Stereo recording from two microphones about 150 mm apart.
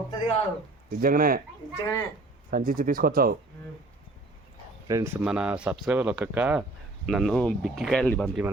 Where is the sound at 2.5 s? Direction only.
70° right (ahead or behind).